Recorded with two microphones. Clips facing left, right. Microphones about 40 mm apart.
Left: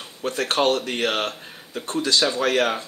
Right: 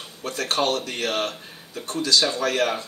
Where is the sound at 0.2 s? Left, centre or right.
Left.